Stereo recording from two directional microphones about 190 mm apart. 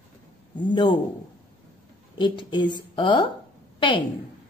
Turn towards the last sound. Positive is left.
turn(degrees=25)  # may be behind; listen again after turning